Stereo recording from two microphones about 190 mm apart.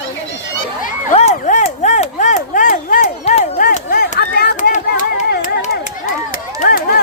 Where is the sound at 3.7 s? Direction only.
50° left (ahead or behind).